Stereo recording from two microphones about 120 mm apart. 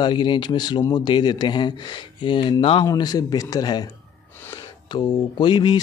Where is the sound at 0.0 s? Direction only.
40° left (ahead or behind).